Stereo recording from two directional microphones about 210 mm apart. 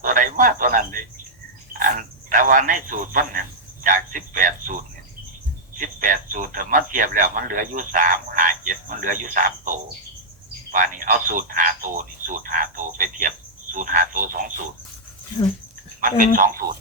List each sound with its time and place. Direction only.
0.0 s a sound: 40° right (ahead or behind)
1.8 s insect: 40° right (ahead or behind)
3.8 s a sound: 40° right (ahead or behind)
5.7 s radio: 40° right (ahead or behind)
10.7 s a man's voice: 40° right (ahead or behind)
16.0 s speech: 40° right (ahead or behind)